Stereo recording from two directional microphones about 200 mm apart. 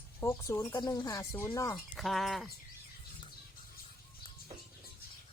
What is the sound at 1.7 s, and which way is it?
Speech, centre (ahead or behind).